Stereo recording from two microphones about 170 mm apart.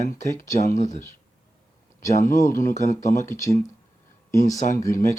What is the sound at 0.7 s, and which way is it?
Speech, 45° left (ahead or behind).